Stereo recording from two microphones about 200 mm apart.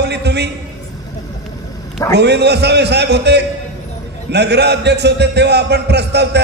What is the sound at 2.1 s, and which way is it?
A man's voice, 55° right (ahead or behind).